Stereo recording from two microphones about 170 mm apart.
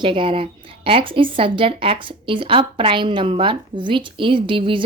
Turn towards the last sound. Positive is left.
turn(degrees=-30)  # may be behind; listen again after turning